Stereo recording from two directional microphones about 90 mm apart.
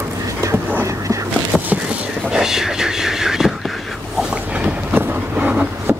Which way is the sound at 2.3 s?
5° right (ahead or behind).